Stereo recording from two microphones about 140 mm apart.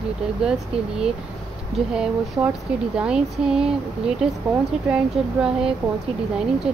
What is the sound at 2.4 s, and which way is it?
Speech, 25° right (ahead or behind).